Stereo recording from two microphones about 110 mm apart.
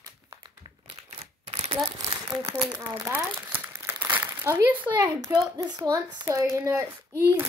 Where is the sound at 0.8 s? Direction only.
65° right (ahead or behind).